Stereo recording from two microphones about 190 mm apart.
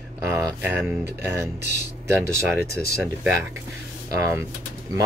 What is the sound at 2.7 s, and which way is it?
Speech, 55° left (ahead or behind).